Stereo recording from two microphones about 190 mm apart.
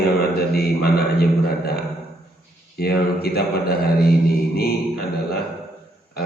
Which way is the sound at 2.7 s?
55° left (ahead or behind).